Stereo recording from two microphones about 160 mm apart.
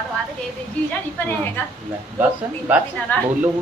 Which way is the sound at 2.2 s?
10° right (ahead or behind).